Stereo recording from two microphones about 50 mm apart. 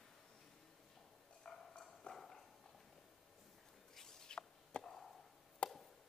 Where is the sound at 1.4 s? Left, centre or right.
Centre.